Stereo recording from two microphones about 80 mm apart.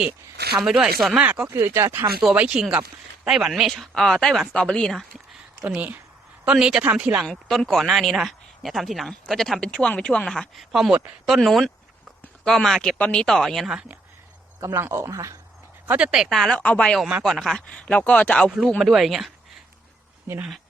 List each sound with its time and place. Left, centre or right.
0.6 s speech: centre
1.2 s speech: centre
1.5 s speech: right
2.3 s speech: centre
4.9 s speech: centre
6.4 s speech: centre
7.3 s speech: centre
13.7 s speech: centre
14.8 s speech: right
15.9 s speech: centre
16.3 s speech: centre
16.6 s speech: centre
17.2 s speech: centre
18.8 s speech: centre